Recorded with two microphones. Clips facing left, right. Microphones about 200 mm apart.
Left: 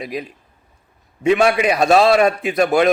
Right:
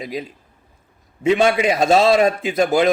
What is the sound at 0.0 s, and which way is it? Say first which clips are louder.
Speech: left 1 dB; 25° right (ahead or behind).